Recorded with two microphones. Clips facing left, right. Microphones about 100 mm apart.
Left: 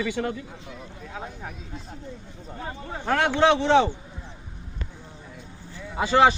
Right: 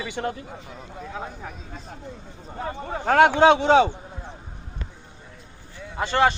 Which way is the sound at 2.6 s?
90° right.